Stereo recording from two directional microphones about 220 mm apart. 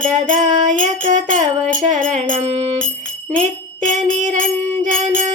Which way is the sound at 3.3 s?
35° right (ahead or behind).